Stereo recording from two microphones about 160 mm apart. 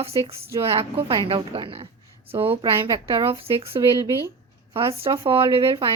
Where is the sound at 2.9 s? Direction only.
20° right (ahead or behind).